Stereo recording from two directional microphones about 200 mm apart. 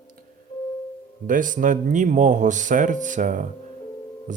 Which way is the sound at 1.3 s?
40° right (ahead or behind).